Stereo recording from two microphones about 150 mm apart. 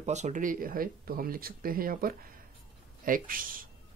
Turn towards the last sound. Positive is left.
turn(degrees=-70)  # may be behind; listen again after turning